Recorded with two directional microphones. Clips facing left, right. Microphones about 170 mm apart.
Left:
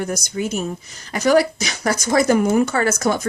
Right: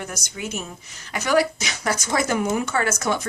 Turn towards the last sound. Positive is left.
turn(degrees=40)  # may be behind; listen again after turning